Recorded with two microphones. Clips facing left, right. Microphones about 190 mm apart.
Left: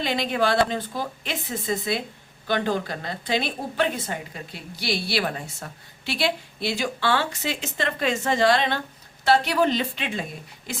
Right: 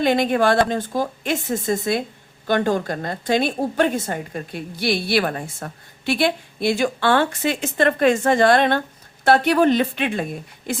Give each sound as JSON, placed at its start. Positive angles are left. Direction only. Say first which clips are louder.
{"t": 0.0, "sound": "a woman's voice", "louder": "right 6 dB", "side_deg": -50}